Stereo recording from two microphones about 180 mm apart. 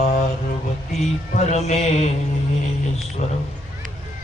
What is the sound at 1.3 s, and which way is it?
Mantra, 40° left (ahead or behind).